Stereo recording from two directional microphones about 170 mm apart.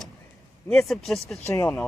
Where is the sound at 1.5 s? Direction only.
15° left (ahead or behind).